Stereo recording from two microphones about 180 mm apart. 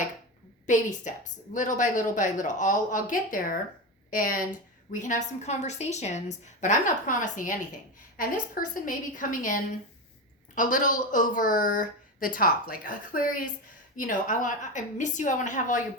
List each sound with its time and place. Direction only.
0.7 s a woman's voice: 45° left (ahead or behind)